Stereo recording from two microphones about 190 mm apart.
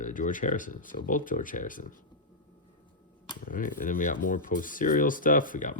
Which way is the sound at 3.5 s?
45° left (ahead or behind).